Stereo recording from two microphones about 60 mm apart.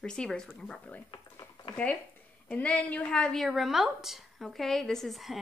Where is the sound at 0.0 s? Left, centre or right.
Centre.